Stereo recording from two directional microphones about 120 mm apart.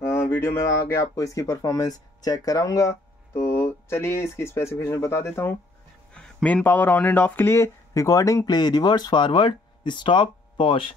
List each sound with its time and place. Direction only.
0.0 s speech: 20° left (ahead or behind)
6.1 s speech: 10° left (ahead or behind); by 10.9 s 45° left (ahead or behind)